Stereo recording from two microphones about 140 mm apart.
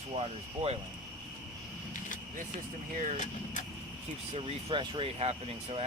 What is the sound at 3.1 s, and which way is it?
Speech, 60° left (ahead or behind).